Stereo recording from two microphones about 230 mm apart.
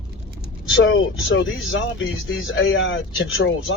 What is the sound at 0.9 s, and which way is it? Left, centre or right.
Speech, left.